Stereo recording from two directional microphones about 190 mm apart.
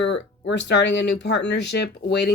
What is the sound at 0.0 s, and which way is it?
Speech, 70° left (ahead or behind).